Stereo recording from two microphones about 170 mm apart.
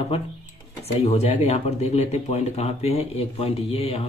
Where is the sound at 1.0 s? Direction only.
40° left (ahead or behind).